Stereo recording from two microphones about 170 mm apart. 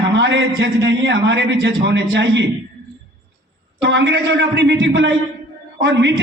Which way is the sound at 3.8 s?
90° right.